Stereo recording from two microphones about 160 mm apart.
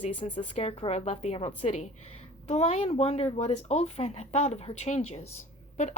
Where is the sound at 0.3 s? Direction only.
35° left (ahead or behind).